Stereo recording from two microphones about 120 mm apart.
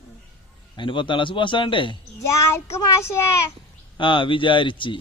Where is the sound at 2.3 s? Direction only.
25° left (ahead or behind).